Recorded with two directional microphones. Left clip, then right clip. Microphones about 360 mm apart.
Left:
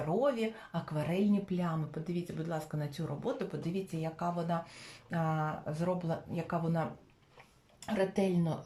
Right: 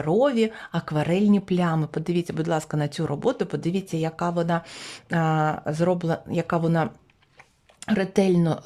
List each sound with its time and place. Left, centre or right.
0.0 s speech: right
7.9 s speech: right